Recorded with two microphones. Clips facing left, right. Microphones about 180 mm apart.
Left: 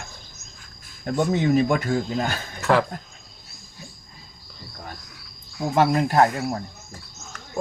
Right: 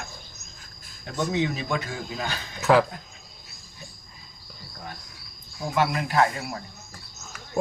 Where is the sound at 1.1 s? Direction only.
50° left (ahead or behind).